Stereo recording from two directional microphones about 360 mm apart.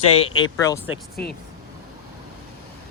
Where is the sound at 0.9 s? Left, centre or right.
Left.